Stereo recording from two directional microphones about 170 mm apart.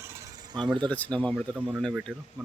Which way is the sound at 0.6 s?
25° right (ahead or behind).